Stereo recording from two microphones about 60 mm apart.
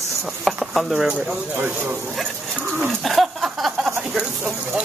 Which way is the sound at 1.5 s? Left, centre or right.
Right.